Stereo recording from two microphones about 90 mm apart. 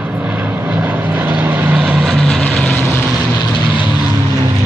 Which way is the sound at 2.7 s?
20° left (ahead or behind).